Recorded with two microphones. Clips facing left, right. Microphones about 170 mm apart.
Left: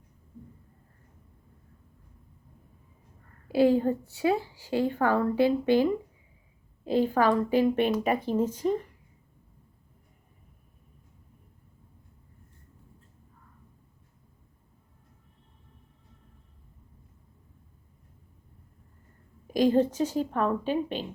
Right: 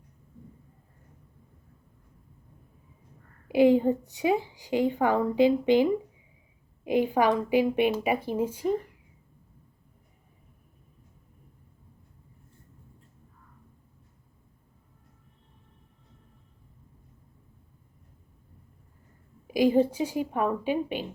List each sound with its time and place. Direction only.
3.5 s a woman's voice: 15° right (ahead or behind)
19.5 s a woman's voice: 10° right (ahead or behind)